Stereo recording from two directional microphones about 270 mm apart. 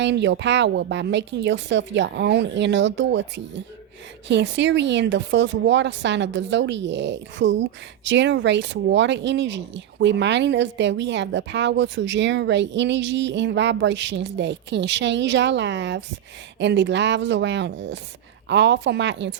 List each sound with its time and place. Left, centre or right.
0.0 s speech: right